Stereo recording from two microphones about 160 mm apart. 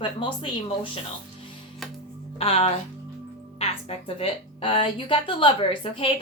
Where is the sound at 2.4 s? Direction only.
35° left (ahead or behind).